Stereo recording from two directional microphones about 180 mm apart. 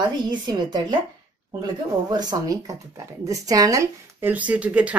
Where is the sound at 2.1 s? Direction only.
20° right (ahead or behind).